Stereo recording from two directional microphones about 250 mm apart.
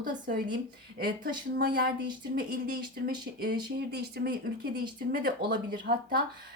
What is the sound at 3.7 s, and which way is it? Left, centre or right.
A woman's voice, right.